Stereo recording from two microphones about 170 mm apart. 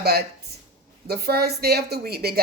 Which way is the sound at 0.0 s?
70° right (ahead or behind).